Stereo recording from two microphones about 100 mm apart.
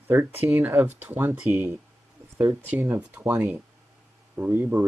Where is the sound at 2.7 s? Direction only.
15° right (ahead or behind).